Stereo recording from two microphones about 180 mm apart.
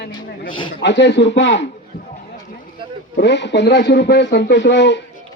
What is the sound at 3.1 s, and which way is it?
Speech, 75° left (ahead or behind).